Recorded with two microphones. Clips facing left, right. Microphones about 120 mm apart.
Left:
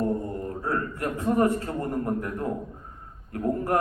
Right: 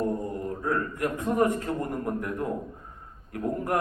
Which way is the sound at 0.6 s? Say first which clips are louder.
Right 1 dB; 35° left (ahead or behind).